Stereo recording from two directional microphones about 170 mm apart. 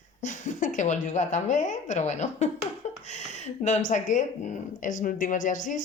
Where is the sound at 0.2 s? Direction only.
45° left (ahead or behind).